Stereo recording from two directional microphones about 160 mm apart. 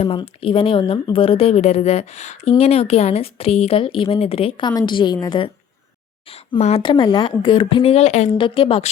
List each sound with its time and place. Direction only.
0.0 s a woman's voice: 35° left (ahead or behind)
6.6 s a woman's voice: 40° left (ahead or behind)
6.8 s a woman's voice: 30° left (ahead or behind); by 8.3 s 45° left (ahead or behind)
8.4 s a woman's voice: 30° left (ahead or behind)